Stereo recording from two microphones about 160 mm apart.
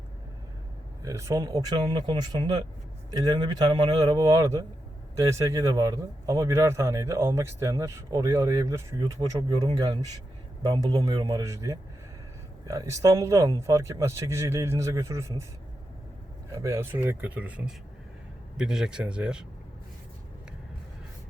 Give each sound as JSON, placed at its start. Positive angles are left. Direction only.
{"t": 1.0, "sound": "a man's voice", "side_deg": -20}
{"t": 16.5, "sound": "speech", "side_deg": -20}